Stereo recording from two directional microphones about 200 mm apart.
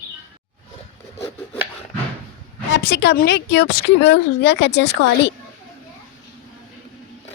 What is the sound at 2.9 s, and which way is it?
Speech, 60° left (ahead or behind).